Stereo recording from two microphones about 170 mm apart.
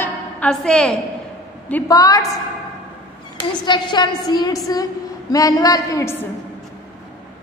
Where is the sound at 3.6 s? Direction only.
25° left (ahead or behind).